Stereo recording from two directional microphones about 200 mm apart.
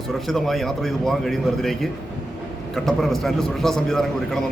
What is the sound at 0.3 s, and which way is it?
A man's voice, centre (ahead or behind).